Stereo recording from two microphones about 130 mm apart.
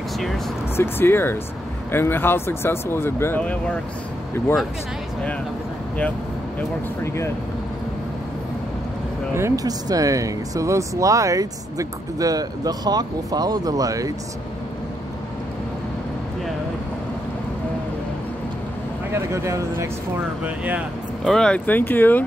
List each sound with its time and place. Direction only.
0.7 s speech: 15° left (ahead or behind)
7.0 s speech: 20° left (ahead or behind)
9.3 s speech: 25° right (ahead or behind)
19.1 s speech: 20° right (ahead or behind)
20.4 s speech: 10° right (ahead or behind)
21.2 s speech: 5° left (ahead or behind)